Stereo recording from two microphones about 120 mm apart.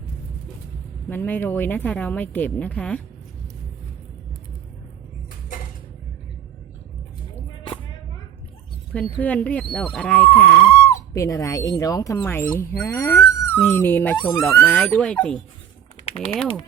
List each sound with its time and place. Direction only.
1.1 s speech: 15° left (ahead or behind)
9.2 s speech: 10° left (ahead or behind)
14.7 s speech: 5° left (ahead or behind)